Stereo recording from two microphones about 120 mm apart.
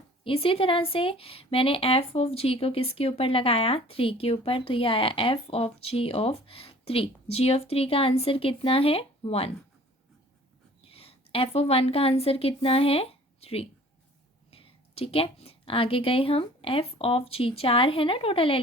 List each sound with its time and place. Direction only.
0.3 s speech: 50° left (ahead or behind)
10.8 s a woman's voice: 55° left (ahead or behind)